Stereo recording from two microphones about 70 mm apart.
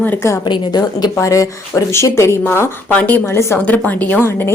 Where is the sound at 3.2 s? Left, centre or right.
Left.